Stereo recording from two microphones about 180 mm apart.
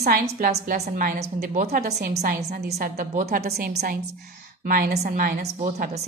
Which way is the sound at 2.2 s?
60° right (ahead or behind).